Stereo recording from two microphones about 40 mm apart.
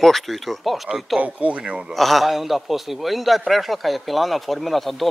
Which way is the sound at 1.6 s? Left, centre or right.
Right.